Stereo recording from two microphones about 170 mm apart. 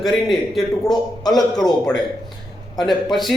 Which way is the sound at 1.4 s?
25° left (ahead or behind).